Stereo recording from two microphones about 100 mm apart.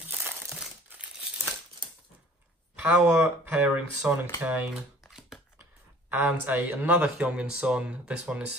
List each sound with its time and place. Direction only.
0.0 s crumpling: 20° right (ahead or behind)
3.1 s speech: 25° right (ahead or behind)
3.5 s speech: 15° right (ahead or behind)
5.0 s a sound: centre (ahead or behind)
6.0 s a sound: 15° right (ahead or behind)
6.4 s speech: 20° right (ahead or behind)